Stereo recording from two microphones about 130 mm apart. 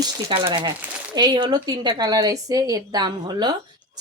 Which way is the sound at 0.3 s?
40° right (ahead or behind).